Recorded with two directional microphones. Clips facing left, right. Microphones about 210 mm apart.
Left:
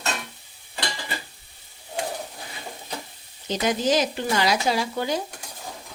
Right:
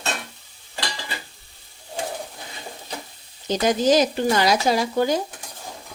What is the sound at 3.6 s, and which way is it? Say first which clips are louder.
Speech: right 4 dB; 40° right (ahead or behind).